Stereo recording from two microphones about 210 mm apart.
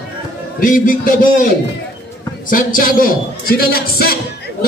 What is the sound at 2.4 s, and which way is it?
A man's voice, 40° left (ahead or behind).